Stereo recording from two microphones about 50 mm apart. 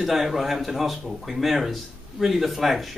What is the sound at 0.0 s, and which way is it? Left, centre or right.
Speech, centre.